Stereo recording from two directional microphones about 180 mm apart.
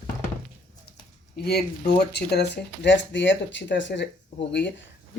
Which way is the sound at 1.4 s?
65° left (ahead or behind).